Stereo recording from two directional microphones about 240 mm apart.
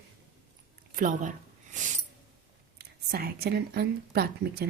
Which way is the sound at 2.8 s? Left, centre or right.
Right.